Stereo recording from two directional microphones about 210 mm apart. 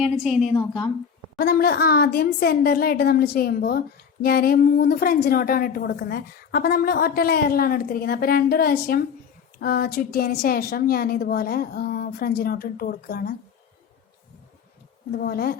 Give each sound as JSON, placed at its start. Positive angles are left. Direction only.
{"t": 0.0, "sound": "a woman's voice", "side_deg": 0}
{"t": 0.5, "sound": "a woman's voice", "side_deg": 20}
{"t": 1.4, "sound": "a woman's voice", "side_deg": 45}
{"t": 15.1, "sound": "a woman's voice", "side_deg": 45}